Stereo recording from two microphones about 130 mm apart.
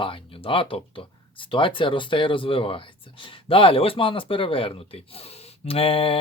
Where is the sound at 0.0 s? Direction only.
40° left (ahead or behind).